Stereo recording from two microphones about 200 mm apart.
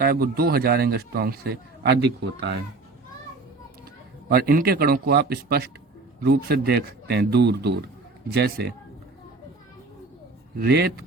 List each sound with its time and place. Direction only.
0.0 s a man's voice: 50° right (ahead or behind)
4.3 s a man's voice: 50° right (ahead or behind)
10.6 s speech: 55° right (ahead or behind)